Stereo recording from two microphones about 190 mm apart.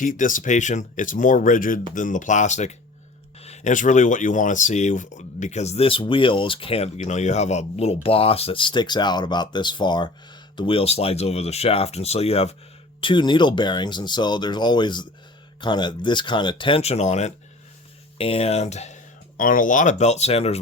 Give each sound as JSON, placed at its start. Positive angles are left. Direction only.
{"t": 0.0, "sound": "speech", "side_deg": 45}
{"t": 19.4, "sound": "speech", "side_deg": 45}